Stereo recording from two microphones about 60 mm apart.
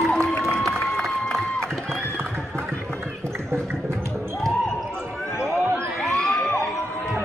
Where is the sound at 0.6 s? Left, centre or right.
Centre.